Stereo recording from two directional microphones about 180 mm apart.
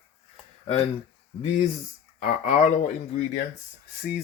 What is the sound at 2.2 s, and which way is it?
Speech, 45° left (ahead or behind).